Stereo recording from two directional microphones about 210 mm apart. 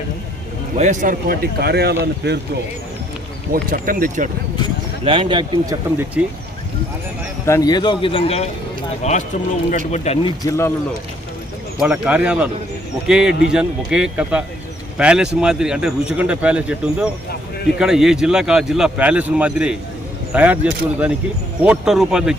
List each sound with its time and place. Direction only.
0.8 s speech: 35° right (ahead or behind); by 2.4 s 50° right (ahead or behind)
3.5 s speech: 40° right (ahead or behind)
5.0 s speech: 25° right (ahead or behind)
6.2 s speech: 5° right (ahead or behind)
7.4 s speech: 15° left (ahead or behind); by 10.3 s 30° left (ahead or behind)
11.8 s speech: 5° right (ahead or behind)